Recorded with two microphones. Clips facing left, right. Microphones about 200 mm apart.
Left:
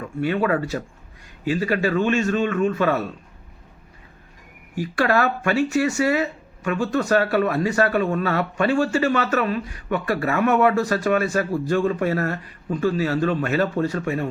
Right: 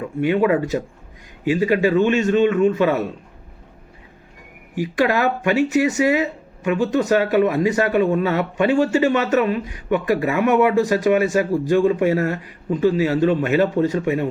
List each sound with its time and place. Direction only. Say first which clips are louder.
0.0 s a man's voice: right 4 dB; 20° right (ahead or behind)
4.7 s speech: right 2 dB; 15° right (ahead or behind)